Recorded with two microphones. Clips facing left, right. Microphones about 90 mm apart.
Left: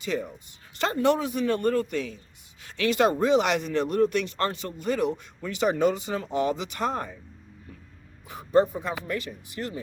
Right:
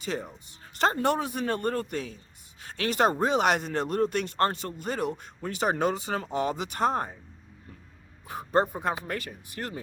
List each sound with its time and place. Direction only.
0.0 s speech: 40° right (ahead or behind)
8.3 s speech: 50° right (ahead or behind)